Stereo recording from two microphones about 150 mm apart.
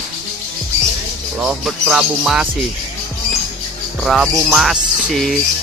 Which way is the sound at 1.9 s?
5° right (ahead or behind).